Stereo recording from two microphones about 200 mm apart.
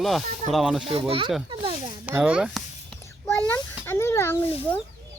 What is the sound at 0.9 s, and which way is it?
Speech, 30° right (ahead or behind).